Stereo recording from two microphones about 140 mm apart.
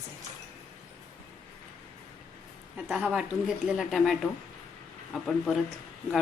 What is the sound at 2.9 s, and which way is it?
Speech, 5° right (ahead or behind).